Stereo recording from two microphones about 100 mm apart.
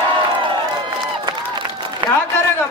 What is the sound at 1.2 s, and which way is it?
Crowd, 50° right (ahead or behind).